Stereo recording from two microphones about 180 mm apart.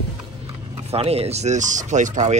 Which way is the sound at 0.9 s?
35° right (ahead or behind).